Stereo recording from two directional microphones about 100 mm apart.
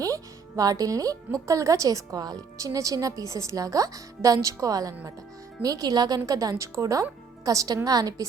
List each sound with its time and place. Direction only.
0.0 s speech: 35° right (ahead or behind)